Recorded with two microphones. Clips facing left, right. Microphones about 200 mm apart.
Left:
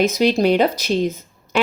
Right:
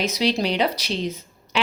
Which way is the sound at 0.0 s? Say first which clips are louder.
Left 6 dB; 50° left (ahead or behind).